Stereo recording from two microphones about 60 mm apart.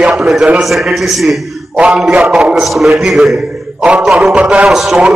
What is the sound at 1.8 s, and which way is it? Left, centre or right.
Speech, centre.